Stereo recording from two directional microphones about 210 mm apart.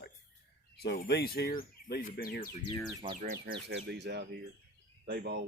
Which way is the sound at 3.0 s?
25° right (ahead or behind).